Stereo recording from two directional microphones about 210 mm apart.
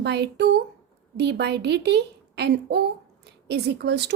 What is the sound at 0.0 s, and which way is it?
A woman's voice, 55° right (ahead or behind).